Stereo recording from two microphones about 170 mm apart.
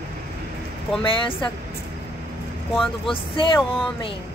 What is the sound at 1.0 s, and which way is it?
Speech, 30° left (ahead or behind).